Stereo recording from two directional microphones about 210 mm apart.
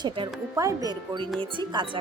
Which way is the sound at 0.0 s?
20° right (ahead or behind).